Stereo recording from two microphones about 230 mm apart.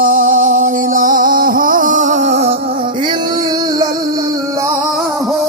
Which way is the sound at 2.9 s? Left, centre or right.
Centre.